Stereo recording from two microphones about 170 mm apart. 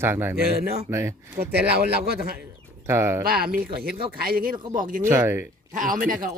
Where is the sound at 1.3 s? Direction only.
65° right (ahead or behind).